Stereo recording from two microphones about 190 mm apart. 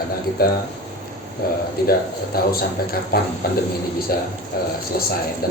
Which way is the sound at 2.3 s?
55° left (ahead or behind).